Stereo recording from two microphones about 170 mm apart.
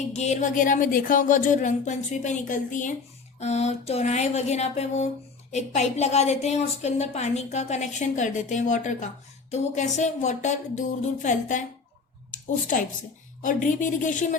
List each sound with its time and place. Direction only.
0.1 s a woman's voice: 40° left (ahead or behind)